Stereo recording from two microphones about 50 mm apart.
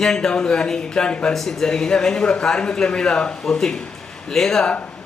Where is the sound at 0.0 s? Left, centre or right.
Centre.